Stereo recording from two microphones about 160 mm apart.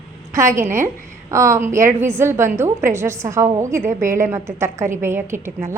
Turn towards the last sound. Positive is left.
turn(degrees=-15)  # may be behind; listen again after turning